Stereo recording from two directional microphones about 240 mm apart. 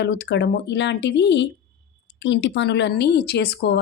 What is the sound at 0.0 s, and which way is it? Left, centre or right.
Speech, left.